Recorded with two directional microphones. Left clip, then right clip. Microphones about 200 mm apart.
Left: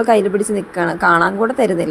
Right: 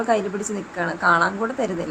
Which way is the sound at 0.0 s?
25° left (ahead or behind).